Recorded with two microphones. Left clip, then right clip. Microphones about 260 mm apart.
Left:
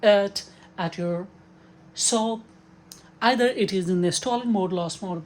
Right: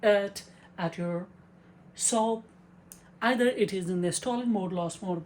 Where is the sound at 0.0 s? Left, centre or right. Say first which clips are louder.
Left 6 dB; left.